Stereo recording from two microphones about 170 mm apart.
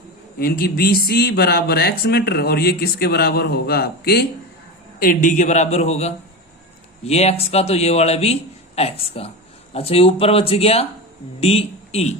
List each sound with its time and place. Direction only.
0.3 s speech: 60° left (ahead or behind)
4.9 s a man's voice: 50° left (ahead or behind)